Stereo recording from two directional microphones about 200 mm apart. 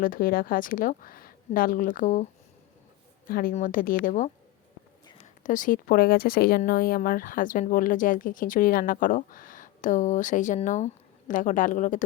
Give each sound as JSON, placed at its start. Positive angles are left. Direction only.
{"t": 0.0, "sound": "speech", "side_deg": 45}
{"t": 3.2, "sound": "speech", "side_deg": 45}